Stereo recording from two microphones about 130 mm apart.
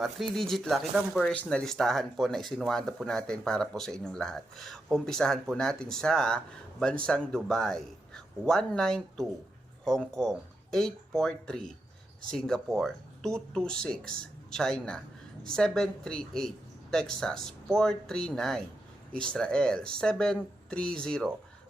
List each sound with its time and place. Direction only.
0.0 s speech: centre (ahead or behind)